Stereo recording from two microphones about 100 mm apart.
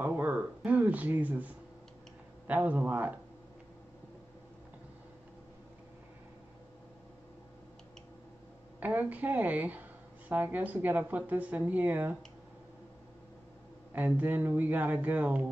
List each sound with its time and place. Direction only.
0.0 s a sound: 15° right (ahead or behind)
2.4 s speech: 15° right (ahead or behind)
8.7 s speech: 15° right (ahead or behind)
13.9 s speech: 15° right (ahead or behind)